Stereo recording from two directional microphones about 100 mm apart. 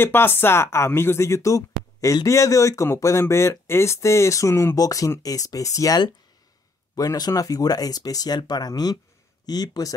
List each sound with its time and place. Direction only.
0.0 s speech: 20° left (ahead or behind); by 9.9 s 40° left (ahead or behind)